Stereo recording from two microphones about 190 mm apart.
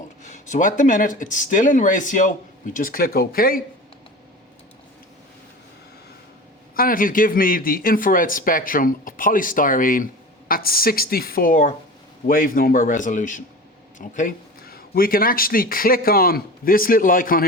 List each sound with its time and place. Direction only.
0.2 s speech: 40° left (ahead or behind)
6.7 s speech: 45° left (ahead or behind)